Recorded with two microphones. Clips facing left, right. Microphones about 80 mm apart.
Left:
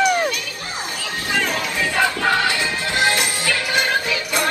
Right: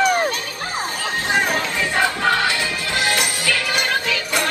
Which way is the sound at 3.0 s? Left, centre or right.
Left.